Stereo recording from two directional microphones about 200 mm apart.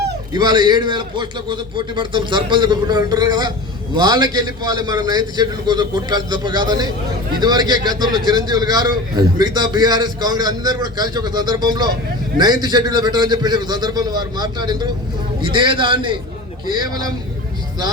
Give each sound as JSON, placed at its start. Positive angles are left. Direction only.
{"t": 0.3, "sound": "a man's voice", "side_deg": -20}